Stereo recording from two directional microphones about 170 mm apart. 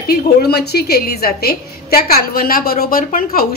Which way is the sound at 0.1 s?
65° left (ahead or behind).